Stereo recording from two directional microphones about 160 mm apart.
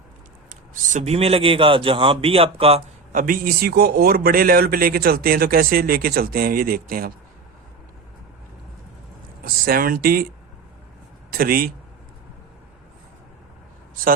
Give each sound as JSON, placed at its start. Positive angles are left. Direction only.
{"t": 0.7, "sound": "a man's voice", "side_deg": -45}
{"t": 3.1, "sound": "speech", "side_deg": -60}
{"t": 9.4, "sound": "speech", "side_deg": -65}
{"t": 11.3, "sound": "speech", "side_deg": -65}